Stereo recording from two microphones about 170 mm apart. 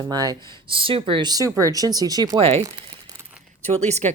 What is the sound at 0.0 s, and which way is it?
Speech, 20° right (ahead or behind).